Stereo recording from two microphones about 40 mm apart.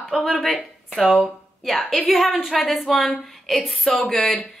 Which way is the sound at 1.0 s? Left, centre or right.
Centre.